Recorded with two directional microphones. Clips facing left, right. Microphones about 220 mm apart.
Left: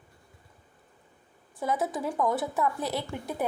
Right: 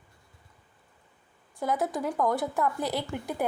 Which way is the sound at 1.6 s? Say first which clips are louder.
Right 1 dB; centre (ahead or behind).